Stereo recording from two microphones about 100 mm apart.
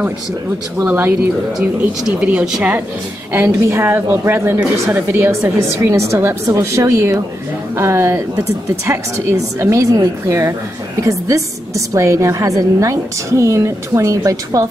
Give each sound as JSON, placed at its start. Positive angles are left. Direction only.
{"t": 0.8, "sound": "a woman's voice", "side_deg": -20}
{"t": 3.3, "sound": "a woman's voice", "side_deg": -25}
{"t": 5.9, "sound": "a woman's voice", "side_deg": -30}